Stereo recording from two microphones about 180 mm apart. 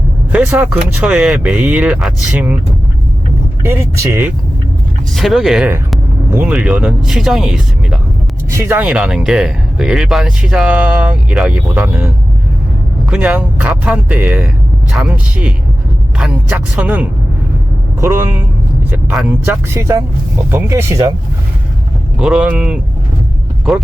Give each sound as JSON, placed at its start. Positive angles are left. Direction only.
{"t": 0.3, "sound": "speech", "side_deg": -10}
{"t": 3.6, "sound": "speech", "side_deg": -15}
{"t": 5.1, "sound": "speech", "side_deg": 0}
{"t": 8.4, "sound": "speech", "side_deg": -15}
{"t": 22.2, "sound": "speech", "side_deg": -5}